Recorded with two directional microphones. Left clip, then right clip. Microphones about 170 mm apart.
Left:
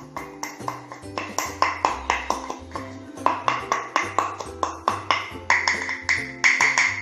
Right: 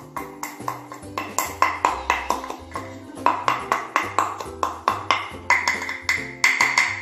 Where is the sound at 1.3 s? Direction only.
5° left (ahead or behind).